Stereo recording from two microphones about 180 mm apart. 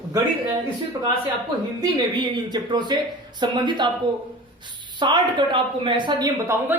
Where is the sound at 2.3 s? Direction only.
25° right (ahead or behind).